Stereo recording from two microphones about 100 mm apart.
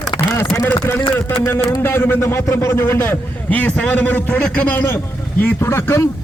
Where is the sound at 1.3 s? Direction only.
25° left (ahead or behind).